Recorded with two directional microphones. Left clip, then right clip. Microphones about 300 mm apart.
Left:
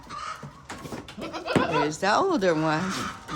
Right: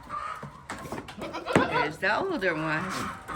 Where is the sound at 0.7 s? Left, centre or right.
Centre.